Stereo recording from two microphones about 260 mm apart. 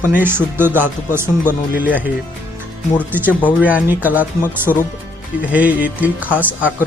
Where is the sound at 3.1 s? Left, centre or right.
Centre.